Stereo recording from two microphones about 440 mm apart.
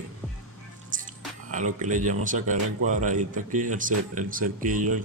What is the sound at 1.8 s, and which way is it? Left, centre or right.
Speech, centre.